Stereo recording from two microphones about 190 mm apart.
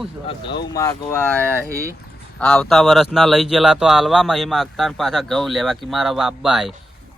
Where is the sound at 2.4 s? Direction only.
5° left (ahead or behind).